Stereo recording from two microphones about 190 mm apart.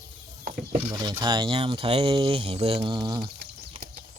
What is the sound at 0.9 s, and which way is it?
Speech, 20° right (ahead or behind).